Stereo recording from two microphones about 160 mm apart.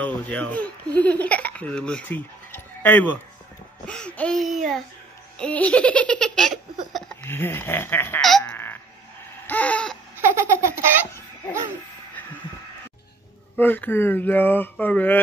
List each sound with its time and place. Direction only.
0.0 s speech: 10° left (ahead or behind)
6.9 s a sound: centre (ahead or behind)
7.2 s speech: 15° left (ahead or behind)
8.2 s a sound: centre (ahead or behind)
9.5 s laughter: 10° left (ahead or behind)
10.2 s baby laughter: 15° right (ahead or behind)
13.6 s speech: 10° left (ahead or behind)